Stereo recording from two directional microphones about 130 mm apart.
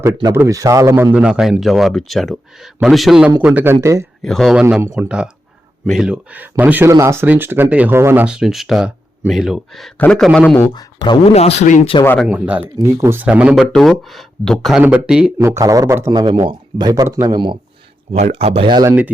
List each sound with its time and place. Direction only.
0.0 s a man's voice: 20° right (ahead or behind)
1.1 s speech: 5° right (ahead or behind); by 4.0 s 25° right (ahead or behind)
4.2 s a man's voice: centre (ahead or behind)
10.8 s speech: 35° left (ahead or behind)
11.3 s speech: 55° left (ahead or behind)
12.3 s speech: 10° right (ahead or behind)
13.7 s speech: centre (ahead or behind)
14.8 s speech: 10° right (ahead or behind)
15.4 s a man's voice: 25° right (ahead or behind)
18.1 s speech: 55° right (ahead or behind)
18.9 s speech: 15° right (ahead or behind)